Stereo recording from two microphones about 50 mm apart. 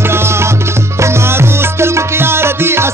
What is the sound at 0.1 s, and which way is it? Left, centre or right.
Music, right.